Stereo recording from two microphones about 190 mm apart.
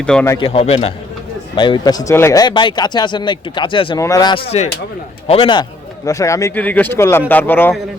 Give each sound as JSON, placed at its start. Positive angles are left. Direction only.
{"t": 0.0, "sound": "speech", "side_deg": 5}
{"t": 0.3, "sound": "a man's voice", "side_deg": 25}
{"t": 6.1, "sound": "speech", "side_deg": 15}